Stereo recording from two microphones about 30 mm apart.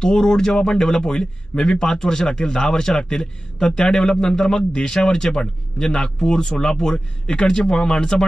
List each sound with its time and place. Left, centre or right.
0.0 s speech: left